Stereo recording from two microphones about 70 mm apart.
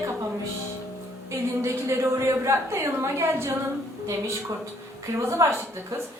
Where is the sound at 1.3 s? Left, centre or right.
Right.